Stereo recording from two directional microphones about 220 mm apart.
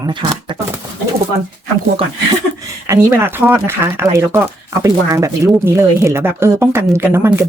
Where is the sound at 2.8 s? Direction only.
10° right (ahead or behind).